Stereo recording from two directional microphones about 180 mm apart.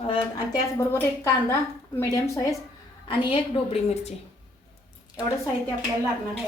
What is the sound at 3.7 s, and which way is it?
Speech, 35° left (ahead or behind).